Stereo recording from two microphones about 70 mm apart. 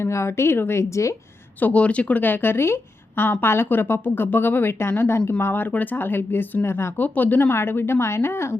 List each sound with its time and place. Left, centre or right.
0.0 s speech: left
1.6 s speech: centre; by 8.4 s left